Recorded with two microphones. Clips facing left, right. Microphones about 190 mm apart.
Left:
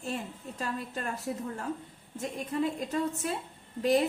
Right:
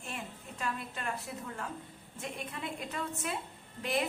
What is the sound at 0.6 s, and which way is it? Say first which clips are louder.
A woman's voice: left 3 dB; 40° left (ahead or behind).